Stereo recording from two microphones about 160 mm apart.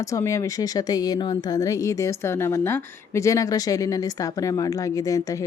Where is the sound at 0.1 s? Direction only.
20° left (ahead or behind).